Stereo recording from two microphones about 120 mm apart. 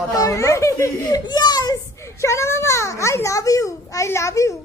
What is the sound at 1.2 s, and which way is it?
A child's voice, 35° left (ahead or behind).